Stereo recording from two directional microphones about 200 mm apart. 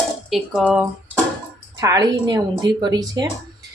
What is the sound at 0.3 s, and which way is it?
Speech, centre (ahead or behind).